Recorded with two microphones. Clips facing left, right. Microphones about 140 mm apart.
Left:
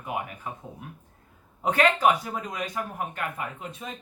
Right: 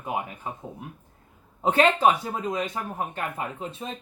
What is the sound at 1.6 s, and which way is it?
Speech, 25° right (ahead or behind).